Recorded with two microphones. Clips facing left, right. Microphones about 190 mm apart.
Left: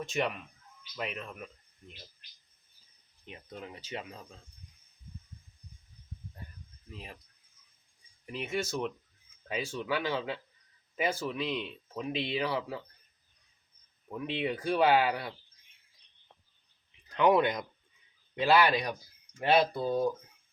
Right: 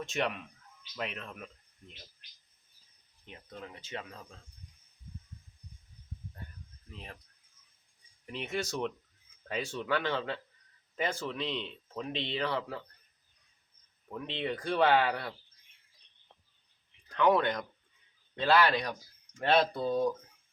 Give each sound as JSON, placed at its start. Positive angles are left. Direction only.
{"t": 0.0, "sound": "speech", "side_deg": 0}
{"t": 3.2, "sound": "speech", "side_deg": 15}
{"t": 6.9, "sound": "speech", "side_deg": 5}
{"t": 8.3, "sound": "speech", "side_deg": 5}
{"t": 14.1, "sound": "speech", "side_deg": 10}
{"t": 17.2, "sound": "speech", "side_deg": 15}